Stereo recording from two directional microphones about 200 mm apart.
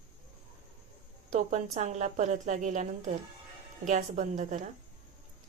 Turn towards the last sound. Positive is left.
turn(degrees=-40)  # may be behind; listen again after turning